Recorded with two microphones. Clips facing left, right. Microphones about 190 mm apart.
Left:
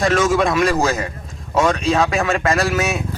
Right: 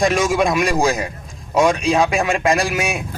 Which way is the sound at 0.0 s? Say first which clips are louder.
Even; 15° right (ahead or behind).